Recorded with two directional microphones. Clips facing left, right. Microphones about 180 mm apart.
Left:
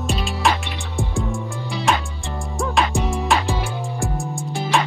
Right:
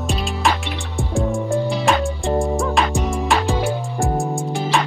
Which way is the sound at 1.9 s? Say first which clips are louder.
Right 2 dB; centre (ahead or behind).